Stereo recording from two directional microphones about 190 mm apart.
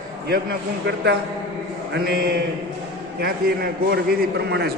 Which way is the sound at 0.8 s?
60° right (ahead or behind).